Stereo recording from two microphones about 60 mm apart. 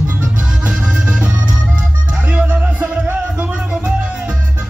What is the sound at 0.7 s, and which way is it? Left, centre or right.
Music, centre.